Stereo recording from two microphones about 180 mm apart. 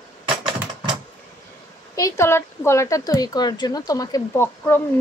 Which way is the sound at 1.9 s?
15° left (ahead or behind).